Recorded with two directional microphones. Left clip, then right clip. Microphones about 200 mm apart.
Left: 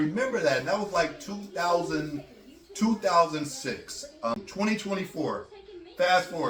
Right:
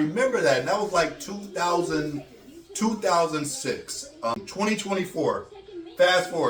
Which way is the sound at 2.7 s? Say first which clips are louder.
Right 1 dB; 20° right (ahead or behind).